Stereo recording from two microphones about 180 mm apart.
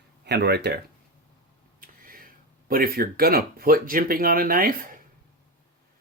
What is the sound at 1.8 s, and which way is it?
Speech, 50° right (ahead or behind).